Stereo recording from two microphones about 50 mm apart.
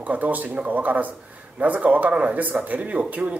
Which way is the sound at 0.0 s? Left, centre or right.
Right.